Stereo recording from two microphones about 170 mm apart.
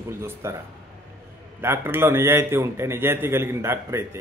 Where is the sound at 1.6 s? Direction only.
15° right (ahead or behind).